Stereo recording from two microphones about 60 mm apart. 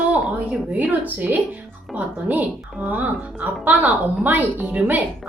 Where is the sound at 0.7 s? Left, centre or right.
Right.